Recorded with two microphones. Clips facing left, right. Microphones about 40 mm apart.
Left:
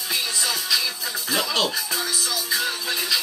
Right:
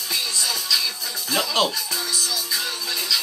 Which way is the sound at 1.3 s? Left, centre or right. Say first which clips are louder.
Right 2 dB; centre.